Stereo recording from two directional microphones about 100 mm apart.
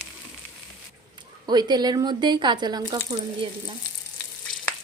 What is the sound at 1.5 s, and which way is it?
Speech, 45° right (ahead or behind).